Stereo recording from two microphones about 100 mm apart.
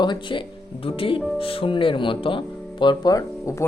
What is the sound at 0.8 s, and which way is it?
Speech, 65° left (ahead or behind).